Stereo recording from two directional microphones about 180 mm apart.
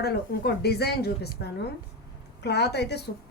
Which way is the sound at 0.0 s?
65° left (ahead or behind).